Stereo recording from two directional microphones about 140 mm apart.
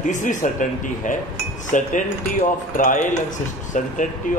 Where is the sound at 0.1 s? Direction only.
65° left (ahead or behind).